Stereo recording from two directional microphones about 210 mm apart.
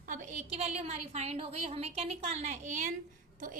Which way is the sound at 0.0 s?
40° right (ahead or behind).